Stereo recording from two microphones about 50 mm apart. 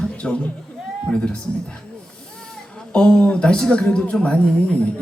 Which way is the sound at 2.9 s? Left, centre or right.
Centre.